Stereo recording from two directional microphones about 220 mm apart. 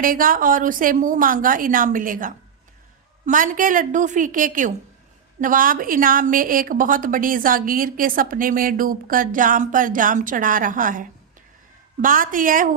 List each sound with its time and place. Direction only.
0.0 s a woman's voice: 40° right (ahead or behind)